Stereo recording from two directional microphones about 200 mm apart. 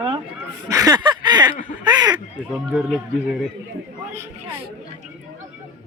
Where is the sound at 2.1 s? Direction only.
Centre (ahead or behind).